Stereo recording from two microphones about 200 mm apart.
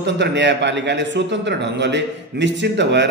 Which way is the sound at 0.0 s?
60° right (ahead or behind).